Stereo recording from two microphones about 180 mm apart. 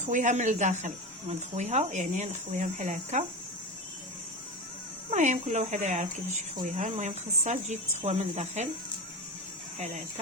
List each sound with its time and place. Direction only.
0.0 s speech: 45° right (ahead or behind)
5.1 s speech: 40° right (ahead or behind)
9.7 s speech: 40° right (ahead or behind)